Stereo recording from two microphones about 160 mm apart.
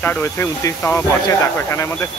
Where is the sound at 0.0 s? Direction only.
15° left (ahead or behind).